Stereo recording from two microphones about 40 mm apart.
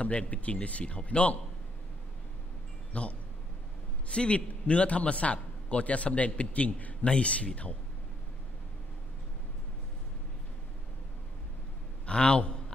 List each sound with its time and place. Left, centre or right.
0.0 s a man's voice: left
2.9 s a man's voice: left
12.1 s a man's voice: left